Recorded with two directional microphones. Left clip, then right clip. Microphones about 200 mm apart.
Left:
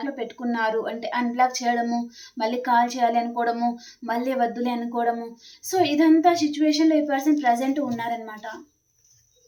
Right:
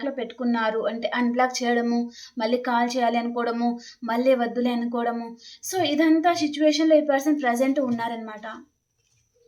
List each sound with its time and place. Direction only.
0.0 s speech: 25° right (ahead or behind)